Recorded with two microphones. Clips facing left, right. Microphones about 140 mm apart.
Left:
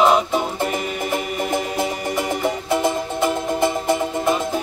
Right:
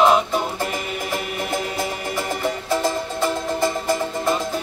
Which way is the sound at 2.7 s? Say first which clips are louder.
Left 1 dB; 20° left (ahead or behind).